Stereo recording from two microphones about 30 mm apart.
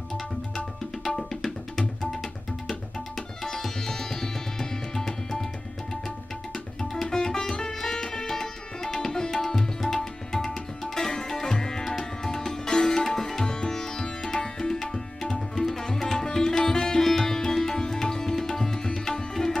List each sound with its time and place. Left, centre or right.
1.0 s tabla: centre
3.4 s music: centre
6.8 s music: centre
9.2 s tabla: centre
12.2 s music: centre